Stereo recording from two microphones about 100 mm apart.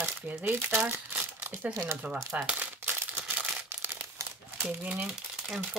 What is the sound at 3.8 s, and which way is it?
Crumpling, 25° right (ahead or behind).